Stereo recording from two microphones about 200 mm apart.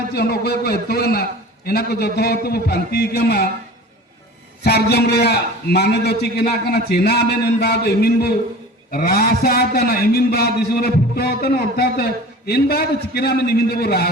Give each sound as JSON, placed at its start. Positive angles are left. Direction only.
{"t": 0.1, "sound": "a man's voice", "side_deg": 50}
{"t": 4.6, "sound": "a man's voice", "side_deg": 55}